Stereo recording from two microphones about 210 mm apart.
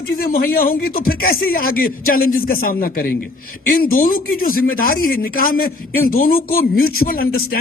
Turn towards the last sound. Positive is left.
turn(degrees=45)  # may be behind; listen again after turning